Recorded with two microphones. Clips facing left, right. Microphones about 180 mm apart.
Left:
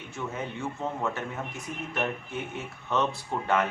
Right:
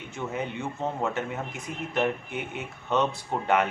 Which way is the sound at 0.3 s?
20° right (ahead or behind).